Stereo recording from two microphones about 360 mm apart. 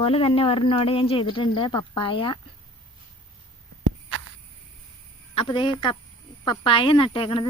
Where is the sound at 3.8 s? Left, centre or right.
Right.